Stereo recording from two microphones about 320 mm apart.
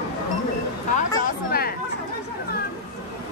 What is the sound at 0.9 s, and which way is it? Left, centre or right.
Speech, left.